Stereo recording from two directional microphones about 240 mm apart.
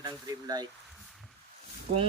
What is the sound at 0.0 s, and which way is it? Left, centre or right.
Speech, centre.